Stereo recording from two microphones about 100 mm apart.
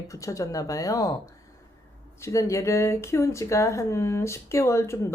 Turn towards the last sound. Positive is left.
turn(degrees=30)  # may be behind; listen again after turning